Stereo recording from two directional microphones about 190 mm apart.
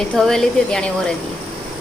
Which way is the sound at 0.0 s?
5° left (ahead or behind).